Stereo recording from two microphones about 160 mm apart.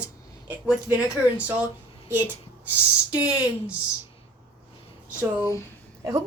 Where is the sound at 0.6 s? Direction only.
10° right (ahead or behind).